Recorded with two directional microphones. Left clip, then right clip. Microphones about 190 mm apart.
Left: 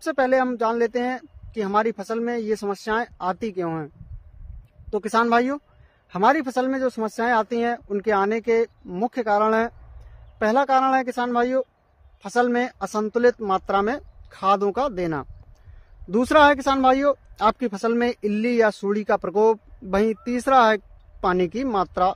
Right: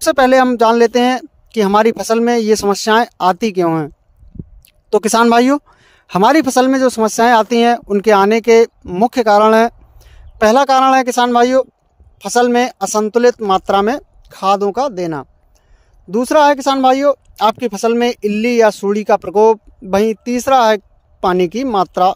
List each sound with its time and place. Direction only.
0.0 s speech: 55° right (ahead or behind); by 22.1 s 35° right (ahead or behind)